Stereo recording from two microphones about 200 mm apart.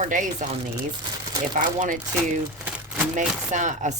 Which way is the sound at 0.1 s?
40° right (ahead or behind).